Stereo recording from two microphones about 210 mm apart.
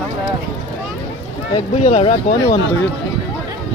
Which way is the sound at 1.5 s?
30° left (ahead or behind).